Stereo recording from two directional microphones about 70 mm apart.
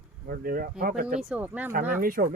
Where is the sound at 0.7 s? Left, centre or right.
Centre.